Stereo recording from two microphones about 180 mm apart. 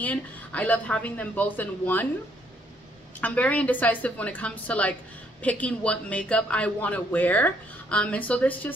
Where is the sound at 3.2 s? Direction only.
10° left (ahead or behind).